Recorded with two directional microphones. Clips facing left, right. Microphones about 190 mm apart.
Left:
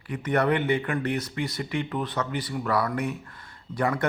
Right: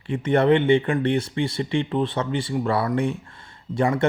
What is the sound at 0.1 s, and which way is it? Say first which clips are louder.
Speech: right 6 dB; 25° right (ahead or behind).